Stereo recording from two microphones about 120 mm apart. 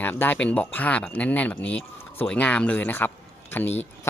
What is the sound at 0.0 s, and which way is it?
Speech, 15° left (ahead or behind).